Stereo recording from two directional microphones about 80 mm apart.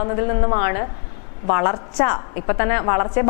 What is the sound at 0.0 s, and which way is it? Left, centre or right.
A woman's voice, left.